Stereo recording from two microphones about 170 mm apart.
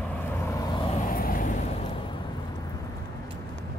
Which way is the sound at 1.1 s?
55° left (ahead or behind).